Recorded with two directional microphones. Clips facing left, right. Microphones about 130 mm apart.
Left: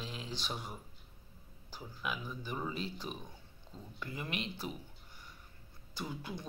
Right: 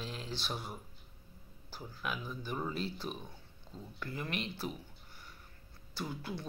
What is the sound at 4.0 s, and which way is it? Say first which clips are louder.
Speech: right 1 dB; 10° left (ahead or behind).